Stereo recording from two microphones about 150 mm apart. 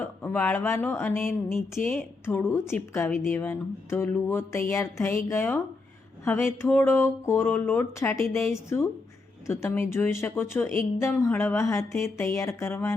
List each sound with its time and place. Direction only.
0.0 s speech: 10° left (ahead or behind)